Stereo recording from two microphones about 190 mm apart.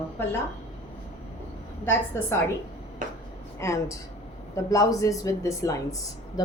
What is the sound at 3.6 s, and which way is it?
A woman's voice, 15° left (ahead or behind).